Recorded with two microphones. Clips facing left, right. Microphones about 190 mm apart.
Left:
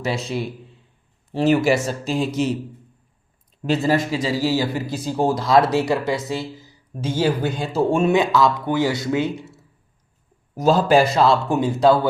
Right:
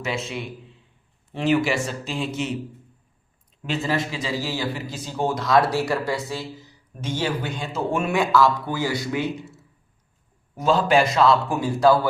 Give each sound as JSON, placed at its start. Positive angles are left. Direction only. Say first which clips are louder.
{"t": 0.0, "sound": "speech", "louder": "left 4 dB", "side_deg": 35}
{"t": 3.6, "sound": "speech", "louder": "left 6 dB", "side_deg": 40}
{"t": 7.0, "sound": "speech", "louder": "left 6 dB", "side_deg": 35}
{"t": 10.5, "sound": "speech", "louder": "left 3 dB", "side_deg": 40}